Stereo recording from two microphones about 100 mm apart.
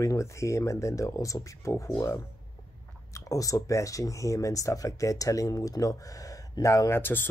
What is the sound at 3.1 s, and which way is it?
Speech, 35° left (ahead or behind).